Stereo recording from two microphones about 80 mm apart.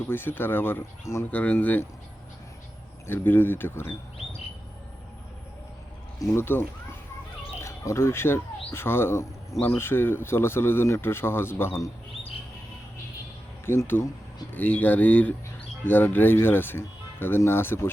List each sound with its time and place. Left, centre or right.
0.1 s speech: left
3.1 s speech: left
6.1 s speech: left
13.7 s speech: left